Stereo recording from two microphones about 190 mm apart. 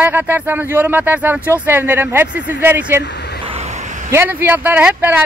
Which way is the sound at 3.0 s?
60° left (ahead or behind).